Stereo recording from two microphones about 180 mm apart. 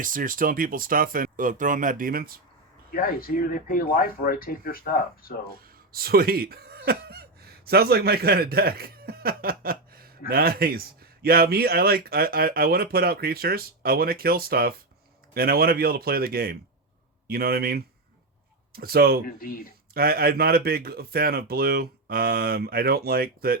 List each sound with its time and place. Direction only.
0.0 s speech: 50° right (ahead or behind)
2.9 s speech: 55° left (ahead or behind)
5.5 s speech: 55° right (ahead or behind)
19.2 s speech: 55° left (ahead or behind)
19.9 s speech: 55° right (ahead or behind)